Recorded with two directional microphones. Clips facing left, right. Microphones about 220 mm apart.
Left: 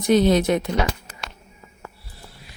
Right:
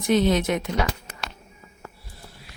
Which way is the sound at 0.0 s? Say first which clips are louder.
Left 3 dB; 40° left (ahead or behind).